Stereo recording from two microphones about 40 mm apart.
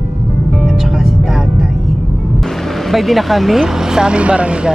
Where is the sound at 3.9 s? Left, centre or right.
Right.